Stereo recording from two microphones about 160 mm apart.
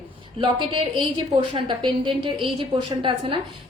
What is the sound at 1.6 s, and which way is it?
A woman's voice, 30° right (ahead or behind).